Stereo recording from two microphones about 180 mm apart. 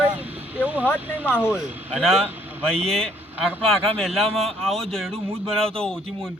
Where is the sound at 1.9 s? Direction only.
Centre (ahead or behind).